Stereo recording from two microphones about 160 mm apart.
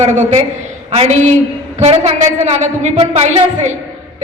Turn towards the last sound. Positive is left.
turn(degrees=-45)  # may be behind; listen again after turning